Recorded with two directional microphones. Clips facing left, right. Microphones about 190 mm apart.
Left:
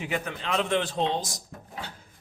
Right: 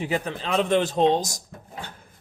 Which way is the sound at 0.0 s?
35° right (ahead or behind).